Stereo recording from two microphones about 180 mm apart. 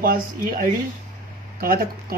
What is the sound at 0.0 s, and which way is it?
Speech, 50° right (ahead or behind).